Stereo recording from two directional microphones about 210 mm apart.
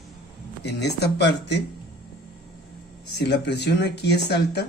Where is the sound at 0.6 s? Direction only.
55° left (ahead or behind).